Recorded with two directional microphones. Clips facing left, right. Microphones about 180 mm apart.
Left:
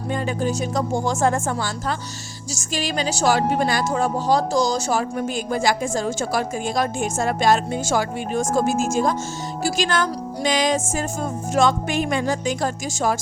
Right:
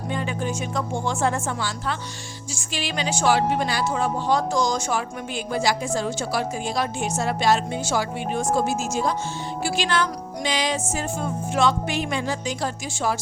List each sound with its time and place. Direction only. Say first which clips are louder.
0.1 s a woman's voice: left 4 dB; 40° left (ahead or behind)